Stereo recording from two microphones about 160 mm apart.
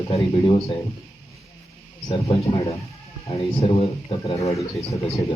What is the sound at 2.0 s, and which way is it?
Speech, 40° left (ahead or behind).